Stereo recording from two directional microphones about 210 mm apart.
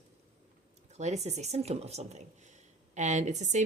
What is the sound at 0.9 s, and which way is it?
Speech, 35° right (ahead or behind).